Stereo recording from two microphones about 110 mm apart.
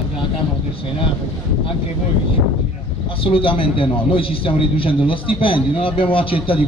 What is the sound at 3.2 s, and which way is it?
A man's voice, 55° left (ahead or behind).